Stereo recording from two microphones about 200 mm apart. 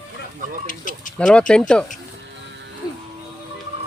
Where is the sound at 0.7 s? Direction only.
40° left (ahead or behind).